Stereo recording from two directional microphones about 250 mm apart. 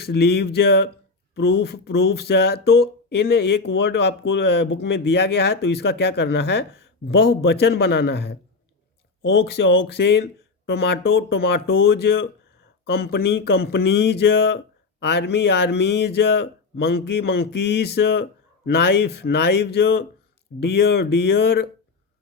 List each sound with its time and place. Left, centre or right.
0.0 s speech: left